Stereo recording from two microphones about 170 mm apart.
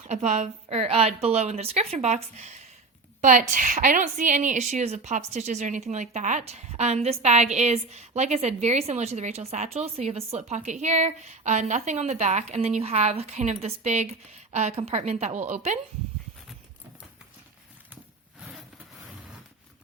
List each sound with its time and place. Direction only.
0.0 s a woman's voice: 45° right (ahead or behind)